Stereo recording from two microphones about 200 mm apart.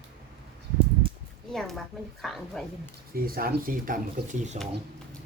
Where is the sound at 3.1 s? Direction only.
45° right (ahead or behind).